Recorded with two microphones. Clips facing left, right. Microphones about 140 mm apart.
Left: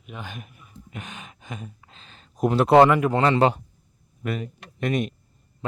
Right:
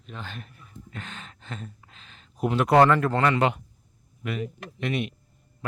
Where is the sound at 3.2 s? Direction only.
30° left (ahead or behind).